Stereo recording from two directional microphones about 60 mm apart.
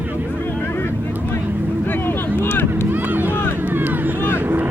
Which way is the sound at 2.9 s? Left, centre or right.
Right.